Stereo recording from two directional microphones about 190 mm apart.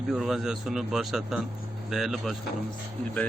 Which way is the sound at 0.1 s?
Centre (ahead or behind).